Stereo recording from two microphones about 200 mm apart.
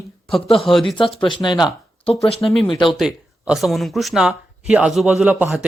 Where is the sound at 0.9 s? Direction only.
25° left (ahead or behind).